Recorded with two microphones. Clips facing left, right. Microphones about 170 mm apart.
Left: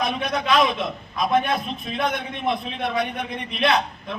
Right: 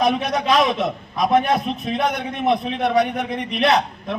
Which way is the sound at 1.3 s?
40° right (ahead or behind).